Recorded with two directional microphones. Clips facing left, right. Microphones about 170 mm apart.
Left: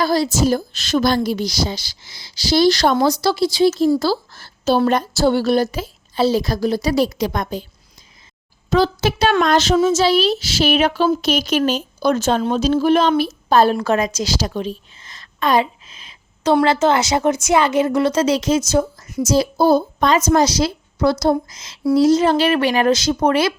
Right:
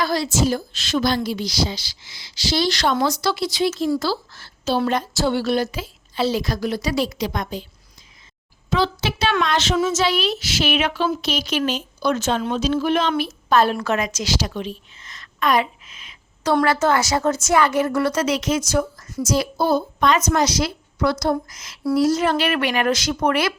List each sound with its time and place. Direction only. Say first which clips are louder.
0.0 s a woman's voice: left 4 dB; 35° left (ahead or behind)
8.7 s a child's voice: left 5 dB; 40° left (ahead or behind); by 19.2 s 20° left (ahead or behind)
19.3 s a woman's voice: left 5 dB; 30° left (ahead or behind)